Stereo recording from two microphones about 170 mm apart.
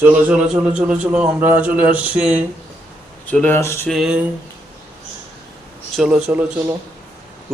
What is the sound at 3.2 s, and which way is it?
Speech, 10° left (ahead or behind).